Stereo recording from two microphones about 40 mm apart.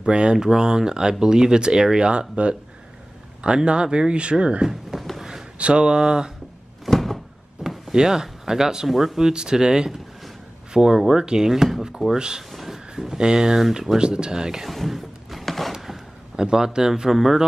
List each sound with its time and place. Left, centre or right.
0.0 s speech: right
4.9 s a sound: centre
5.6 s speech: right
6.9 s door: centre
7.9 s speech: centre
12.4 s a sound: centre
13.2 s speech: centre
13.9 s speech: right
14.7 s a sound: centre
16.3 s speech: centre